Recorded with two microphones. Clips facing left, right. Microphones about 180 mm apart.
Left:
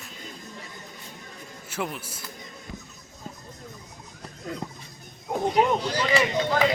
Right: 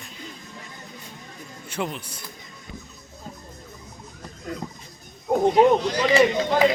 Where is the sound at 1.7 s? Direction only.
5° left (ahead or behind).